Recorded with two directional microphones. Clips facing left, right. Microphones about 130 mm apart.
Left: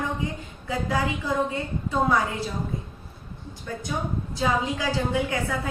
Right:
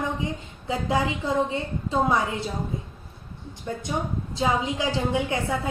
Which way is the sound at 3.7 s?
25° right (ahead or behind).